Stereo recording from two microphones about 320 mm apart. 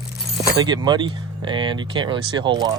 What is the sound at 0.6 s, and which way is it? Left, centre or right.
Speech, centre.